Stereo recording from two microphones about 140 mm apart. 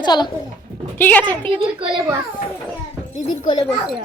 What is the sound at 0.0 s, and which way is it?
Speech, 30° left (ahead or behind).